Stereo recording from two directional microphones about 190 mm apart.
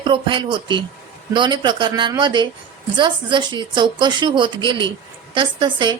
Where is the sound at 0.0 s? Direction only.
25° right (ahead or behind).